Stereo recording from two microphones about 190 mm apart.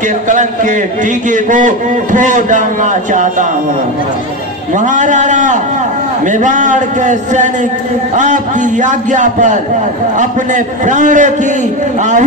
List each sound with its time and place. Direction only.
0.3 s a man's voice: 40° right (ahead or behind)
4.7 s a man's voice: 40° right (ahead or behind)